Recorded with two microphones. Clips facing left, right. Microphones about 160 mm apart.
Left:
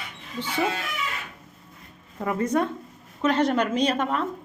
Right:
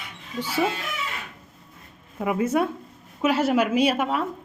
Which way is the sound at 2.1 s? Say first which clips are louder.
Right 1 dB; 10° right (ahead or behind).